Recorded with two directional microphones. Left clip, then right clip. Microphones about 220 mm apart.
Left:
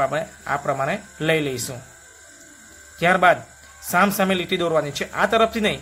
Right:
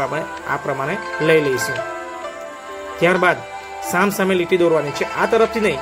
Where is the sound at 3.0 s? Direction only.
5° right (ahead or behind).